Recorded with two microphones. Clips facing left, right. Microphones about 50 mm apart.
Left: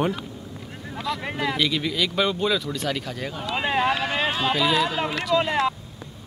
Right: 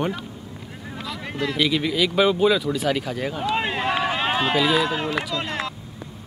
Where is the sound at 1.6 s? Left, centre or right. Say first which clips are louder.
Right 6 dB; centre.